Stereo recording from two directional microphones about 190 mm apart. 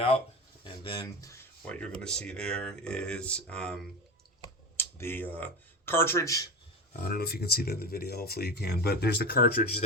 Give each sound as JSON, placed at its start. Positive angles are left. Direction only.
{"t": 0.6, "sound": "speech", "side_deg": 20}
{"t": 1.6, "sound": "speech", "side_deg": 5}
{"t": 4.8, "sound": "speech", "side_deg": 10}
{"t": 7.0, "sound": "speech", "side_deg": 55}